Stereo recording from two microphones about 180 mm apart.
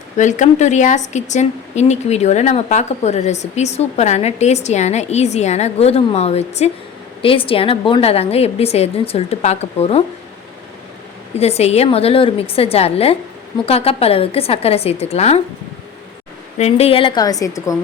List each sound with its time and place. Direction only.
0.2 s speech: 40° left (ahead or behind)
11.3 s speech: 35° left (ahead or behind)
16.6 s a woman's voice: 35° left (ahead or behind); by 17.7 s 20° left (ahead or behind)